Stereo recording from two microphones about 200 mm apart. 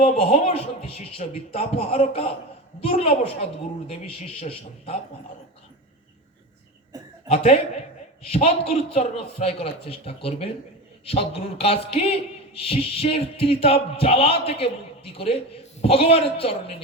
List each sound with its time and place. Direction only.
0.0 s a man's voice: 30° left (ahead or behind)
4.4 s a man's voice: 30° left (ahead or behind)
7.3 s a man's voice: 30° left (ahead or behind)